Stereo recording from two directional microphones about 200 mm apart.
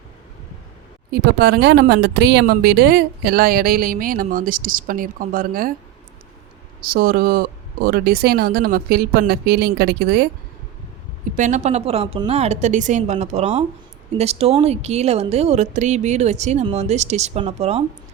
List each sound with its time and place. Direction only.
1.1 s a woman's voice: 55° right (ahead or behind)
6.8 s a woman's voice: 45° right (ahead or behind)
11.3 s speech: 35° right (ahead or behind)